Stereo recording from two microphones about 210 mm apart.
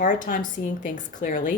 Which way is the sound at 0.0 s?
40° left (ahead or behind).